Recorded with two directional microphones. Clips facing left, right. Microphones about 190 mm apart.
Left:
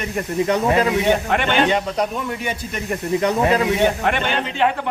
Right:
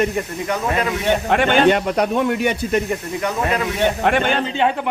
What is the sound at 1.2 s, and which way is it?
A man's voice, 45° right (ahead or behind).